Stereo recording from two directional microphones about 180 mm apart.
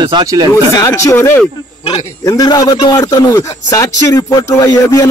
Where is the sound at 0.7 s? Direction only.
15° left (ahead or behind).